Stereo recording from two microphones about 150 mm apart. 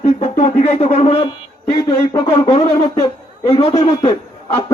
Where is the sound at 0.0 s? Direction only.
50° left (ahead or behind).